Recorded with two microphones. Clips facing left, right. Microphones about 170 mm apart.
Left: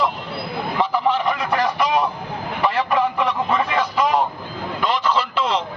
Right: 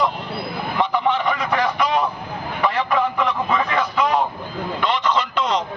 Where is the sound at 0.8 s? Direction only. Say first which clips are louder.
Even; 5° left (ahead or behind).